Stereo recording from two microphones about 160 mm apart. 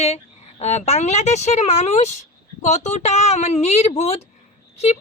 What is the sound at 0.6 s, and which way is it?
Speech, 45° left (ahead or behind).